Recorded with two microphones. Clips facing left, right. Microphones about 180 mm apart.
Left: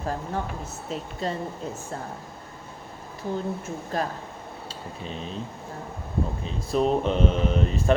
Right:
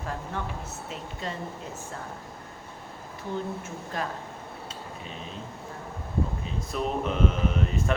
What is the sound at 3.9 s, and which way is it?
Speech, 35° left (ahead or behind).